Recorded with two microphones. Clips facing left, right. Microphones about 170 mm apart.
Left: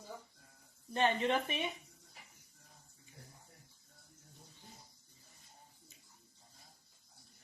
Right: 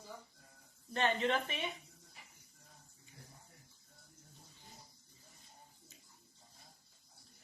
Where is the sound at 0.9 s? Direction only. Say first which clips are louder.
Left 2 dB; 15° left (ahead or behind).